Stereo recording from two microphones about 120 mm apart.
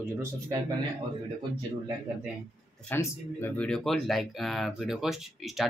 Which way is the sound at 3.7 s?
5° left (ahead or behind).